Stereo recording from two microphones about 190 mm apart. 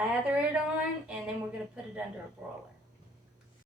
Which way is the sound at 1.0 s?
5° right (ahead or behind).